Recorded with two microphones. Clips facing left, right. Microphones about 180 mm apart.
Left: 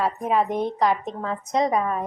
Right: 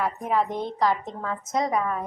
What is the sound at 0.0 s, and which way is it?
A woman's voice, 20° left (ahead or behind).